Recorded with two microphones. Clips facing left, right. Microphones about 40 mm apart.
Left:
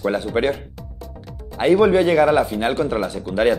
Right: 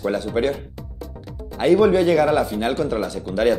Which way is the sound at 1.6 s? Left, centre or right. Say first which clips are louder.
Left 1 dB; centre.